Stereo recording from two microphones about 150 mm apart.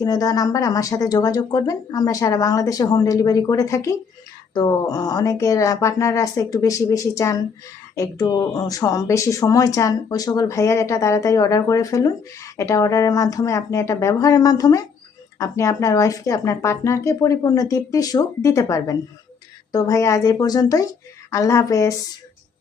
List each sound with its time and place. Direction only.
0.0 s speech: 25° left (ahead or behind)